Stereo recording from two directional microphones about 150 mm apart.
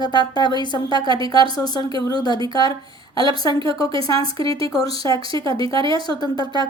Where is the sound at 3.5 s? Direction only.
35° right (ahead or behind).